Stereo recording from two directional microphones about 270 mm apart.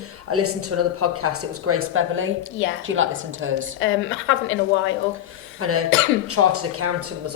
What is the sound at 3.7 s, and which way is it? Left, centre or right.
A woman's voice, left.